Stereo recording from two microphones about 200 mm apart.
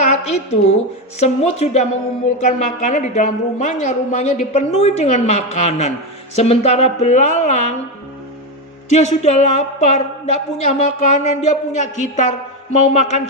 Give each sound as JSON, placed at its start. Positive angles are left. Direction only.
{"t": 0.1, "sound": "a woman's voice", "side_deg": 30}
{"t": 8.9, "sound": "a woman's voice", "side_deg": 35}